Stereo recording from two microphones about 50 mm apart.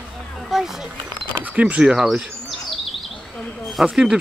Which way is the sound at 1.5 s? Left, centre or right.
Right.